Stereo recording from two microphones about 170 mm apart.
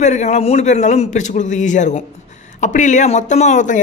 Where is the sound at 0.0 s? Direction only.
45° left (ahead or behind).